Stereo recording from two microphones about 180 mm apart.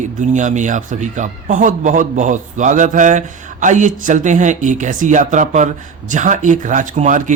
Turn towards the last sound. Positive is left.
turn(degrees=-45)  # may be behind; listen again after turning